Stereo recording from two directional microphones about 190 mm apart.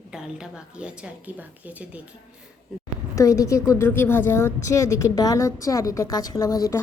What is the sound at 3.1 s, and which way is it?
A woman's voice, 15° left (ahead or behind).